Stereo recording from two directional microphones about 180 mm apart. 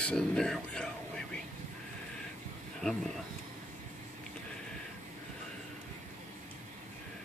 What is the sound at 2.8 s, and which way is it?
Speech, 5° left (ahead or behind).